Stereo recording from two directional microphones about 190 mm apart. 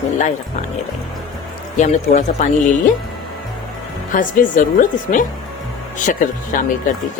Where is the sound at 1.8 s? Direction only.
40° left (ahead or behind).